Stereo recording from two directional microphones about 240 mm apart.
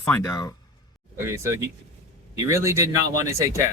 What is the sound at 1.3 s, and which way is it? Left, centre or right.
A man's voice, centre.